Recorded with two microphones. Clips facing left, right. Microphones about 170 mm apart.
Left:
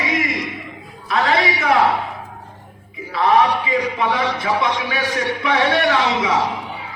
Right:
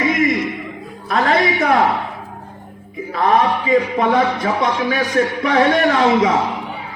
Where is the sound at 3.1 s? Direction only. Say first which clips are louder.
Even; 45° right (ahead or behind).